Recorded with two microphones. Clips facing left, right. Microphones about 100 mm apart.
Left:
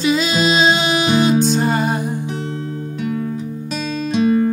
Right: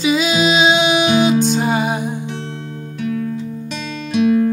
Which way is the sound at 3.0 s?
25° left (ahead or behind).